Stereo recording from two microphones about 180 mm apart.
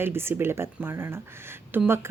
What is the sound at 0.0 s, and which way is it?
Speech, 15° right (ahead or behind).